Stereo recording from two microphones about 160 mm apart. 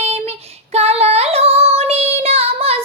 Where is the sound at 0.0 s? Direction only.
40° right (ahead or behind).